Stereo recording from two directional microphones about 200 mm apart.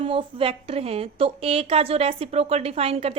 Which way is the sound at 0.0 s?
25° right (ahead or behind).